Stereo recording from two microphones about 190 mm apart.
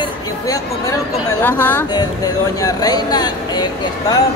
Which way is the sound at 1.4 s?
10° left (ahead or behind).